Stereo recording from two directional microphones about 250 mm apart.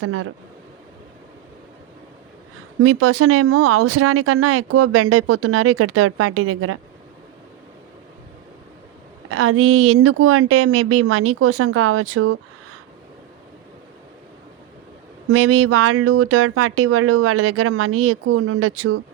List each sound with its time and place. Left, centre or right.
0.0 s speech: right
2.8 s speech: right
9.3 s speech: right
15.3 s speech: right